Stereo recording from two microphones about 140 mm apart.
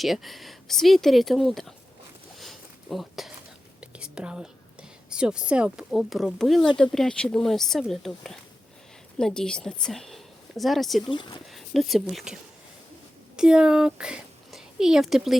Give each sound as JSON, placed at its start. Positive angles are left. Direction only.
{"t": 0.0, "sound": "speech", "side_deg": 0}
{"t": 2.4, "sound": "a sound", "side_deg": 0}
{"t": 3.8, "sound": "speech", "side_deg": -5}
{"t": 11.1, "sound": "speech", "side_deg": 35}
{"t": 11.5, "sound": "speech", "side_deg": 0}